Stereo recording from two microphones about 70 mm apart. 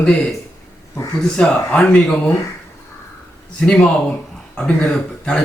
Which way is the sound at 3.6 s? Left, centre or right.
Centre.